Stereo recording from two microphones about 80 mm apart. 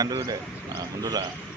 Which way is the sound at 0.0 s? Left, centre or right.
Right.